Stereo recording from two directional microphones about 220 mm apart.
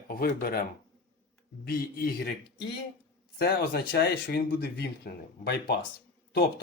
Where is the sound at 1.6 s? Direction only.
45° left (ahead or behind).